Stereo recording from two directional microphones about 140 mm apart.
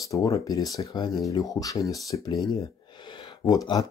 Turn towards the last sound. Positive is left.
turn(degrees=25)  # may be behind; listen again after turning